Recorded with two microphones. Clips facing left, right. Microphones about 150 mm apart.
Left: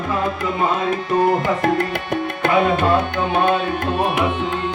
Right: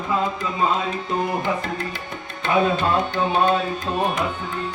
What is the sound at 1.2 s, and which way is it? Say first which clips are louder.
Tabla: left 7 dB; 65° left (ahead or behind).